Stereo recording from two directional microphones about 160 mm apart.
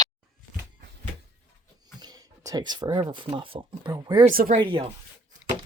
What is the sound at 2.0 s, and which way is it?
Speech, 25° right (ahead or behind).